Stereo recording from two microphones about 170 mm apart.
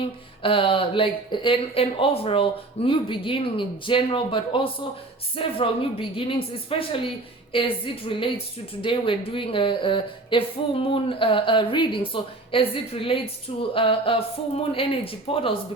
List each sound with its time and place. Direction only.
0.0 s speech: 30° left (ahead or behind)